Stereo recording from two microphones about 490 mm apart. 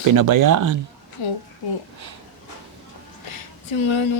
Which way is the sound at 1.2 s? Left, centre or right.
Left.